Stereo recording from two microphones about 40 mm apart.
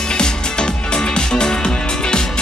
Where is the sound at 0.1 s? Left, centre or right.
Left.